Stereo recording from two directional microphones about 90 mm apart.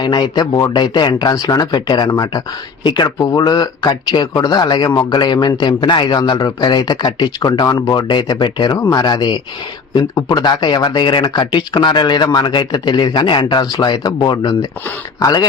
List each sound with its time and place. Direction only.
0.0 s speech: 55° left (ahead or behind)
13.7 s speech: 50° left (ahead or behind)